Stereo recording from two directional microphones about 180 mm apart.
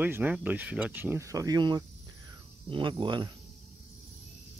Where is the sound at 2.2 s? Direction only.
25° right (ahead or behind).